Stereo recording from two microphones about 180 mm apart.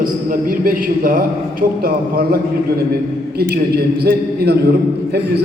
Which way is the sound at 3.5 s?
60° right (ahead or behind).